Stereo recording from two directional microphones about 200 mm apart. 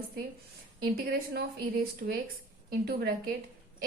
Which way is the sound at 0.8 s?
50° right (ahead or behind).